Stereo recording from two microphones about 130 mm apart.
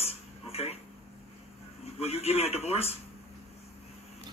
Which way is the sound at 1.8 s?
55° left (ahead or behind).